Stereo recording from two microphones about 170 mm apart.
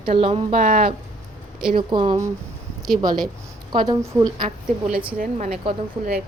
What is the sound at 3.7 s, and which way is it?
Speech, 25° right (ahead or behind).